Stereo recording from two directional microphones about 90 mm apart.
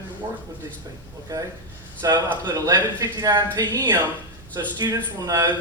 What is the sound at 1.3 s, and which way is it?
A man's voice, 40° right (ahead or behind).